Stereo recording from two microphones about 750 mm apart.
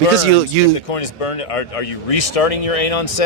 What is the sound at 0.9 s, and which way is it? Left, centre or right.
Speech, left.